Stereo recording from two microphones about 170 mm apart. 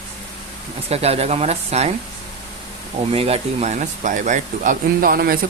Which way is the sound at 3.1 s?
35° right (ahead or behind).